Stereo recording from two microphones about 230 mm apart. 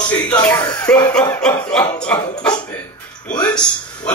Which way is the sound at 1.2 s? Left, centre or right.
Centre.